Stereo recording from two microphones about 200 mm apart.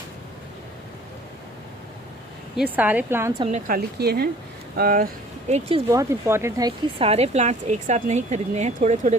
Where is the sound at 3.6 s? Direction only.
50° right (ahead or behind).